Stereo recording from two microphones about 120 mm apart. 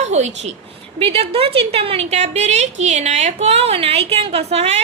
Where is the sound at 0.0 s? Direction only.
70° right (ahead or behind).